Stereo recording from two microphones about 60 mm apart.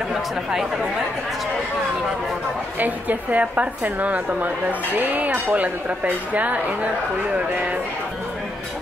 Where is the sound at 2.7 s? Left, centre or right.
Right.